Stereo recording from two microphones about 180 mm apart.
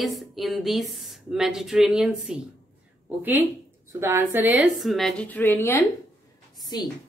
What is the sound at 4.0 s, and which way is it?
Speech, 15° right (ahead or behind).